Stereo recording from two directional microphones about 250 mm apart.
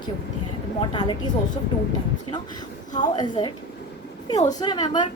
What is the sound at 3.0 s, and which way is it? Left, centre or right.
Speech, centre.